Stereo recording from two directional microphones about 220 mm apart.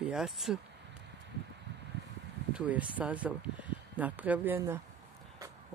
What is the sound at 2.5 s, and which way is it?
Speech, 5° right (ahead or behind).